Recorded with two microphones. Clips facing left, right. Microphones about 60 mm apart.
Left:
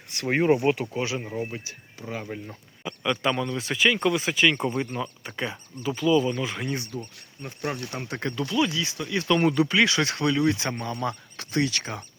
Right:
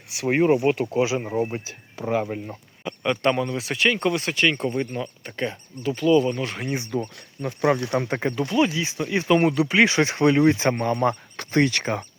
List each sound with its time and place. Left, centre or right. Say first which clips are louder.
0.1 s speech: right 2 dB; centre
0.9 s speech: right 7 dB; centre
1.3 s speech: right 6 dB; right
2.0 s speech: right 11 dB; right
2.2 s speech: right 5 dB; right
2.8 s speech: right 4 dB; centre
6.9 s speech: right 8 dB; right
7.4 s speech: right 10 dB; right
8.2 s speech: right 1 dB; right